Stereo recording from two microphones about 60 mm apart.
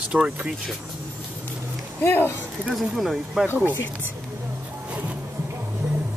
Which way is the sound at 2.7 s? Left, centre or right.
Centre.